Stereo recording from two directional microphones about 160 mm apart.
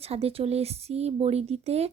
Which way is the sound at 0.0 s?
40° right (ahead or behind).